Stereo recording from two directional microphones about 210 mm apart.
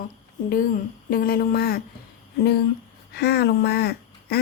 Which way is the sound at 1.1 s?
45° left (ahead or behind).